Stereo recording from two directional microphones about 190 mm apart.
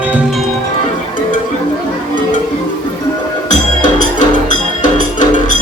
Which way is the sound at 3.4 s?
40° left (ahead or behind).